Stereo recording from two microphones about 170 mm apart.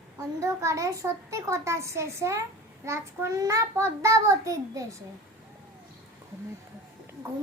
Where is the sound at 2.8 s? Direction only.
15° right (ahead or behind).